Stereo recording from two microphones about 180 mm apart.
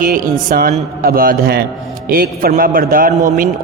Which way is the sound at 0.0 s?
55° right (ahead or behind).